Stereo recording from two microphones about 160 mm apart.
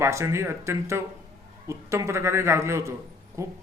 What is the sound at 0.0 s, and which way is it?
A man's voice, 20° right (ahead or behind).